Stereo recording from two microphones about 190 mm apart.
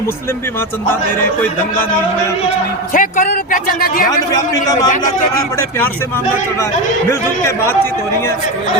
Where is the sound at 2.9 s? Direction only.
45° left (ahead or behind).